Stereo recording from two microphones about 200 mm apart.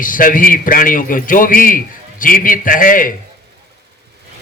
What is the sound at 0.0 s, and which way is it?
A man's voice, 45° left (ahead or behind).